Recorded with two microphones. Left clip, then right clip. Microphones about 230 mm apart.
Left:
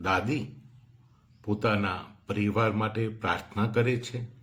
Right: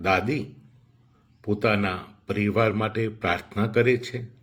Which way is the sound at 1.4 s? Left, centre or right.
Right.